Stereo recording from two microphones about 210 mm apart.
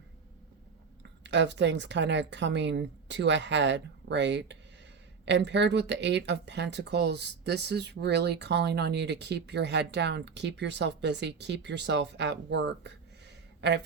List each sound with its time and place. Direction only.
1.2 s a man's voice: 55° right (ahead or behind)